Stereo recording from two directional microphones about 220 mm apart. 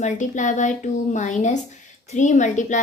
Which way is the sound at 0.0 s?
35° left (ahead or behind).